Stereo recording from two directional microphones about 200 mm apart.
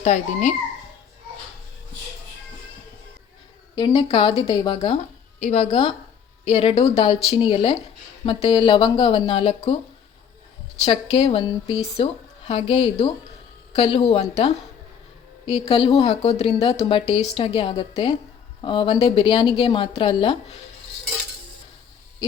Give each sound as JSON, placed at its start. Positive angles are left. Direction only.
{"t": 0.0, "sound": "a woman's voice", "side_deg": 35}
{"t": 3.8, "sound": "a woman's voice", "side_deg": 25}
{"t": 10.8, "sound": "a woman's voice", "side_deg": 30}